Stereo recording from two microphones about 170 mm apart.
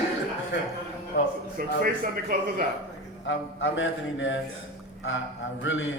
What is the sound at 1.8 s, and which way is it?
Speech, 60° right (ahead or behind).